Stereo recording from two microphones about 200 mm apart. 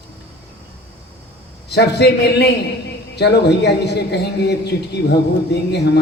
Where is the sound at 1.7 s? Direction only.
55° left (ahead or behind).